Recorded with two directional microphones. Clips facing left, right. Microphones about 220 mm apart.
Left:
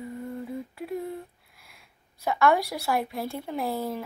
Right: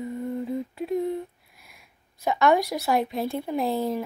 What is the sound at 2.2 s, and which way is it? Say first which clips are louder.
Speech: right 2 dB; 20° right (ahead or behind).